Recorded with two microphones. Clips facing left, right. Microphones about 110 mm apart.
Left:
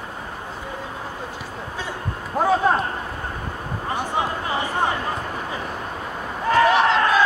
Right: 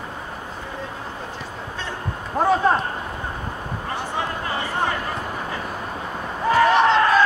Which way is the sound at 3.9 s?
15° left (ahead or behind).